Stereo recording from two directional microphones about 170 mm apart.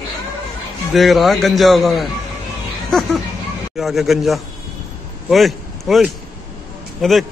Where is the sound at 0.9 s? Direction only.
Centre (ahead or behind).